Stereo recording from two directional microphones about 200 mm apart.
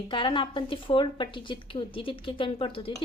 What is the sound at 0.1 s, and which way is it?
A woman's voice, 25° left (ahead or behind).